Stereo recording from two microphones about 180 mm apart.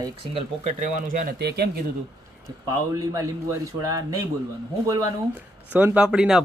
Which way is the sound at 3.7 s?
20° right (ahead or behind).